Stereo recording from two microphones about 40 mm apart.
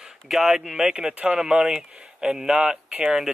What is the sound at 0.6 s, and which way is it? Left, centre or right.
Speech, centre.